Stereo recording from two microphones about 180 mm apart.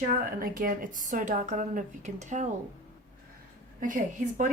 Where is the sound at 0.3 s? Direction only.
50° right (ahead or behind).